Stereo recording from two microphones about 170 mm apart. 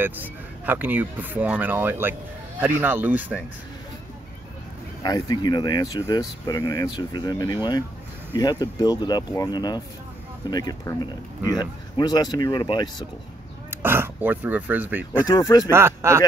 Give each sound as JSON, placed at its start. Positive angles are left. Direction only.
{"t": 0.0, "sound": "speech", "side_deg": -10}
{"t": 5.0, "sound": "speech", "side_deg": 25}
{"t": 13.7, "sound": "speech", "side_deg": -15}
{"t": 15.2, "sound": "speech", "side_deg": 20}
{"t": 15.7, "sound": "speech", "side_deg": -15}